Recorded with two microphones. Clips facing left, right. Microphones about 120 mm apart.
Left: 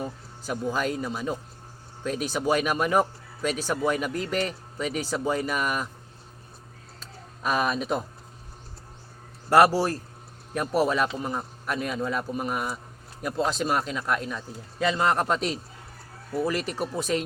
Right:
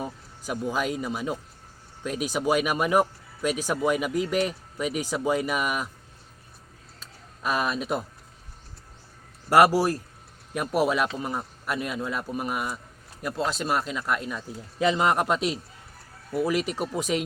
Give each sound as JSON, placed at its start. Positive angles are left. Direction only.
{"t": 0.0, "sound": "speech", "side_deg": -10}
{"t": 7.0, "sound": "a sound", "side_deg": 0}
{"t": 9.5, "sound": "speech", "side_deg": -10}
{"t": 14.8, "sound": "speech", "side_deg": -15}